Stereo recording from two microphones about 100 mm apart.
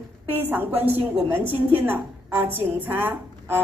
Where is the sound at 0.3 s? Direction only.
20° right (ahead or behind).